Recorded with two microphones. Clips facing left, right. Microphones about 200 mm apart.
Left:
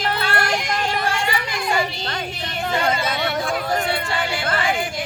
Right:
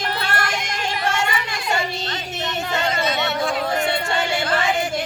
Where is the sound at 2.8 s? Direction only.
50° left (ahead or behind).